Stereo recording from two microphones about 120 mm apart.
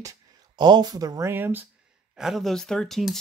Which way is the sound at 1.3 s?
15° right (ahead or behind).